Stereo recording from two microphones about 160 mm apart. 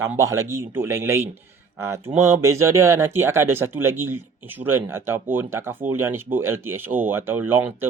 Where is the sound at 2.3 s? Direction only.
15° right (ahead or behind).